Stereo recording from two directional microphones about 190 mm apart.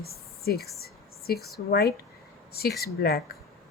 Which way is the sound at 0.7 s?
55° left (ahead or behind).